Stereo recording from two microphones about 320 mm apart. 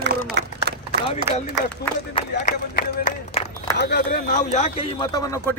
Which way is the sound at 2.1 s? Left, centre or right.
Left.